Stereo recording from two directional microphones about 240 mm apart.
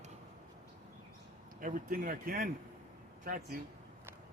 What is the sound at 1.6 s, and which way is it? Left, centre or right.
Speech, right.